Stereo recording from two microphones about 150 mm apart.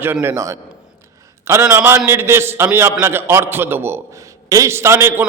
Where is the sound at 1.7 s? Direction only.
20° right (ahead or behind).